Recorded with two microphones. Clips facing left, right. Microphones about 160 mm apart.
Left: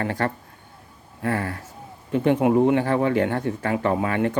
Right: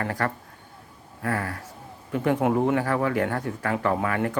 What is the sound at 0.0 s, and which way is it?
Speech, 25° left (ahead or behind).